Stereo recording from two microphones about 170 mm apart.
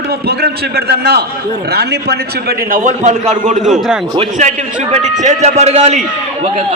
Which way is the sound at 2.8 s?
45° right (ahead or behind).